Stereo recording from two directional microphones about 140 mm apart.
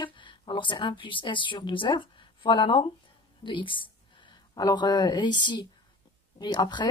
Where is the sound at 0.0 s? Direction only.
35° left (ahead or behind).